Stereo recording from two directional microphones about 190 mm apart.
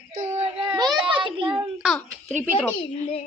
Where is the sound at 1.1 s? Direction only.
25° right (ahead or behind).